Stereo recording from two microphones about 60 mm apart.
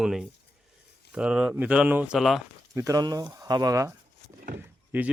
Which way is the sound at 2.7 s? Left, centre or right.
Right.